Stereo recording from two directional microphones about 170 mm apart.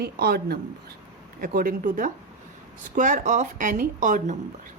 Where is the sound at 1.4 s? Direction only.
55° right (ahead or behind).